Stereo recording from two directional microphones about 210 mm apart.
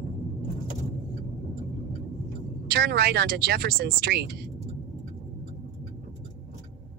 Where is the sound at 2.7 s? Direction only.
50° right (ahead or behind).